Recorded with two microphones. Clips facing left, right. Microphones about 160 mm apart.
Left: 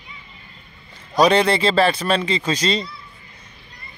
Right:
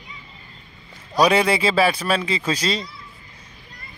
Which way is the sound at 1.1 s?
5° right (ahead or behind).